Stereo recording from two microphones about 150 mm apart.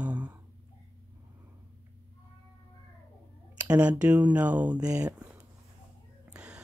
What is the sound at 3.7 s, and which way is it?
Speech, 10° right (ahead or behind).